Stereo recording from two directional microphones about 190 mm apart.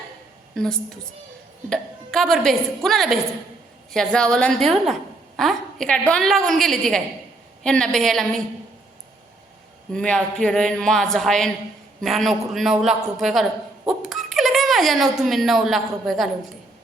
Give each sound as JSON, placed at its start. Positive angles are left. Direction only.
{"t": 0.5, "sound": "a woman's voice", "side_deg": 5}
{"t": 9.9, "sound": "a woman's voice", "side_deg": 5}
{"t": 14.1, "sound": "a sound", "side_deg": 0}
{"t": 15.2, "sound": "a woman's voice", "side_deg": 0}